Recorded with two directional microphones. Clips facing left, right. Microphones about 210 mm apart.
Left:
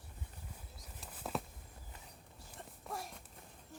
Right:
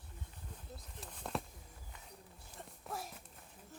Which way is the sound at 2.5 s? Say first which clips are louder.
Even; centre (ahead or behind).